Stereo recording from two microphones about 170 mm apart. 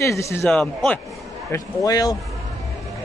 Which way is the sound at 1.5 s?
20° left (ahead or behind).